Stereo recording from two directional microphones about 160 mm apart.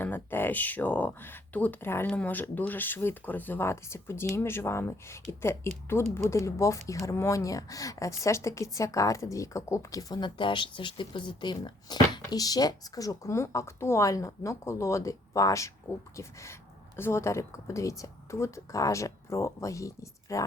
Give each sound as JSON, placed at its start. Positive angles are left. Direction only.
{"t": 0.0, "sound": "a woman's voice", "side_deg": 15}